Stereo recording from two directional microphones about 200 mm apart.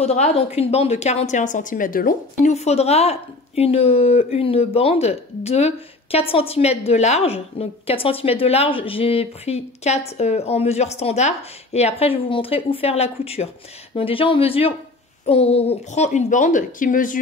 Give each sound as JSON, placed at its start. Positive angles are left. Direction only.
{"t": 0.0, "sound": "a woman's voice", "side_deg": 35}